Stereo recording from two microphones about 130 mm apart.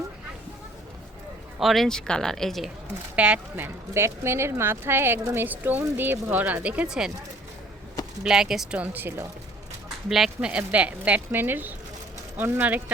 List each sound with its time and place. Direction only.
1.5 s speech: centre (ahead or behind)
3.2 s speech: 10° right (ahead or behind)
8.2 s speech: 5° right (ahead or behind)
10.1 s speech: 5° right (ahead or behind)